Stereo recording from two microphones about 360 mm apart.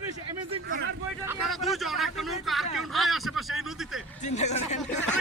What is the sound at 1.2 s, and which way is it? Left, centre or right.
Speech, centre.